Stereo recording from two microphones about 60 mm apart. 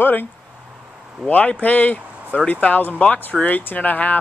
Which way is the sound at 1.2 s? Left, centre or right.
Left.